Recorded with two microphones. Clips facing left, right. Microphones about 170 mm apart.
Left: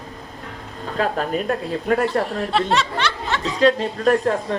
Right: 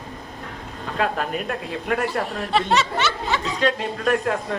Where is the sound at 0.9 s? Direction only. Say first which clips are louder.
Left 2 dB; 35° left (ahead or behind).